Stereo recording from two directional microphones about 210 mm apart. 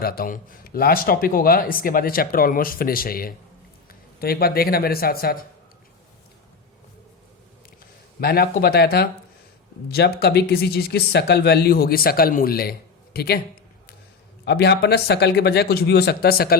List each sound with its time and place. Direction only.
0.0 s speech: 45° left (ahead or behind)
8.2 s speech: 50° left (ahead or behind)
14.4 s speech: 50° left (ahead or behind)